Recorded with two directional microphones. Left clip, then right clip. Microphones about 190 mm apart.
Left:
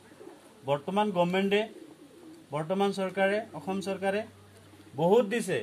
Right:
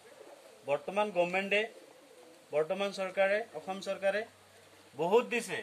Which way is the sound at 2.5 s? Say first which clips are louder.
Left 2 dB; 60° left (ahead or behind).